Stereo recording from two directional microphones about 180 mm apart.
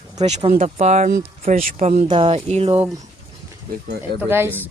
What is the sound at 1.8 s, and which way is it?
Speech, 35° right (ahead or behind).